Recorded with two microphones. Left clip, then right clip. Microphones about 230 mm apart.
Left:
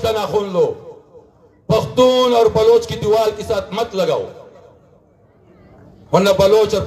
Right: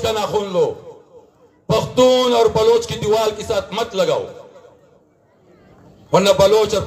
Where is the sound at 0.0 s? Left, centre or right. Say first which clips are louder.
Left 1 dB; right.